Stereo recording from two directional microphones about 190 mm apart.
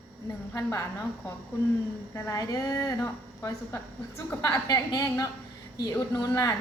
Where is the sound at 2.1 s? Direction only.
15° left (ahead or behind).